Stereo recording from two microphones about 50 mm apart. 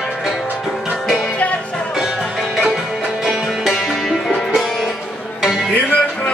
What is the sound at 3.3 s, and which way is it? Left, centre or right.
Music, centre.